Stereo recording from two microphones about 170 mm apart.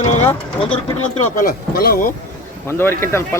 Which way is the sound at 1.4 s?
60° left (ahead or behind).